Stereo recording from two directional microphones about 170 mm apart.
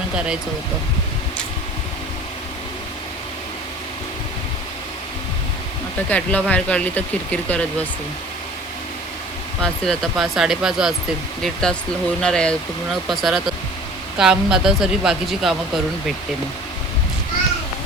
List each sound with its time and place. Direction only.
6.1 s speech: 10° left (ahead or behind)
9.6 s speech: 5° left (ahead or behind)